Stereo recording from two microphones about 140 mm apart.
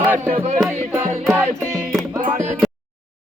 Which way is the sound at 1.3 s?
15° right (ahead or behind).